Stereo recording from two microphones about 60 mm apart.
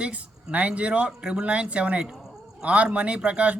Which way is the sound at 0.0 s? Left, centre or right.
Right.